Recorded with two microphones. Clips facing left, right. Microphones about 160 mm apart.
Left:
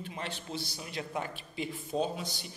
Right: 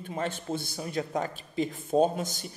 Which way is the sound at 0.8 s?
40° right (ahead or behind).